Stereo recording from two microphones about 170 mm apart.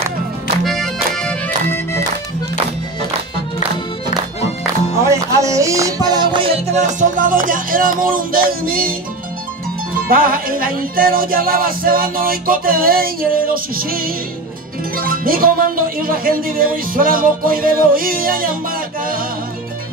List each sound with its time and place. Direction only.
0.7 s music: centre (ahead or behind)
5.0 s music: 20° right (ahead or behind); by 8.9 s 60° right (ahead or behind)
10.0 s speech: 60° right (ahead or behind)